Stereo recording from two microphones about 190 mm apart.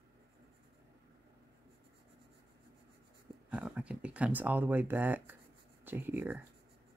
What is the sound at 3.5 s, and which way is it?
Speech, 5° right (ahead or behind).